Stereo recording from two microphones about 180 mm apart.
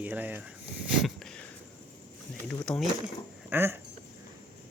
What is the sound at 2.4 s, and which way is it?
Speech, 5° left (ahead or behind).